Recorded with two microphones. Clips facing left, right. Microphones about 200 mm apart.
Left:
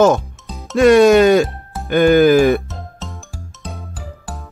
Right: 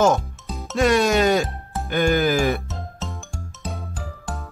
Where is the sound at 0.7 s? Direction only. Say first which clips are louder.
Left 9 dB; 60° left (ahead or behind).